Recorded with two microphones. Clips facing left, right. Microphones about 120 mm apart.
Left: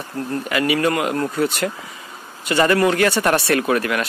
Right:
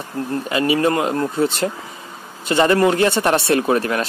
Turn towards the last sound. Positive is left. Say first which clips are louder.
# right 1 dB
turn(degrees=-30)  # may be behind; listen again after turning